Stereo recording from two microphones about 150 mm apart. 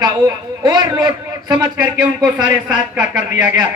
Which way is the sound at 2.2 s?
5° right (ahead or behind).